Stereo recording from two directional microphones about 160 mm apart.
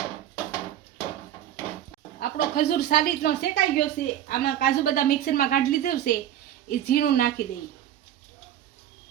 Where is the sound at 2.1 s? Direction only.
80° left.